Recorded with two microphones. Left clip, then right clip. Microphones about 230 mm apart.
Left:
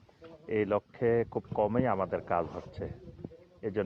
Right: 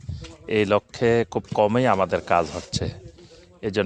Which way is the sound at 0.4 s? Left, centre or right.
Right.